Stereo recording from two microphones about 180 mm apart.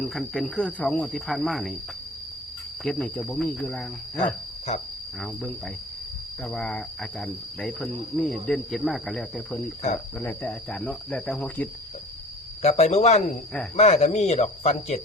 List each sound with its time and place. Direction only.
0.0 s cricket: centre (ahead or behind)
2.8 s cricket: 5° left (ahead or behind)
5.2 s cricket: centre (ahead or behind)
12.6 s speech: 35° left (ahead or behind)